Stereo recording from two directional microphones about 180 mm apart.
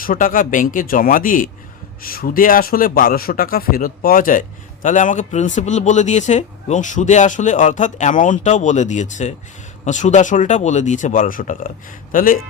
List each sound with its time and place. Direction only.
0.0 s speech: 50° left (ahead or behind)